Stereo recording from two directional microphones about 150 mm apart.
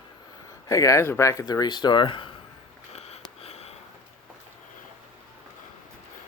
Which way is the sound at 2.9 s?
45° left (ahead or behind).